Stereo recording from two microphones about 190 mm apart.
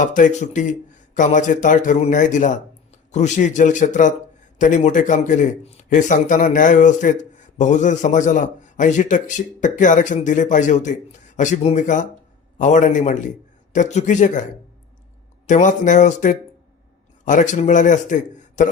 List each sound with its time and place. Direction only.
0.0 s a man's voice: 40° left (ahead or behind)
15.4 s a man's voice: 40° left (ahead or behind)